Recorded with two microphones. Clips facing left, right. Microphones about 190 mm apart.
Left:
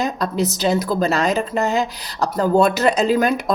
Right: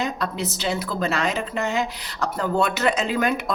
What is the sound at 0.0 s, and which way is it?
A woman's voice, 40° left (ahead or behind).